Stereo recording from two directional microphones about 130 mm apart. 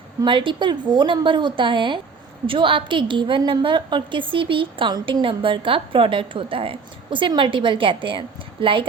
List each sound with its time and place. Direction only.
0.3 s a woman's voice: 40° right (ahead or behind)